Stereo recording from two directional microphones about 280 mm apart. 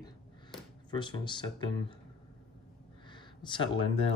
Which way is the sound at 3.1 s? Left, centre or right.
Centre.